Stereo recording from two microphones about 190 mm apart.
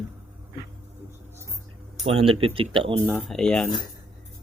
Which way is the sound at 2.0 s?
30° right (ahead or behind).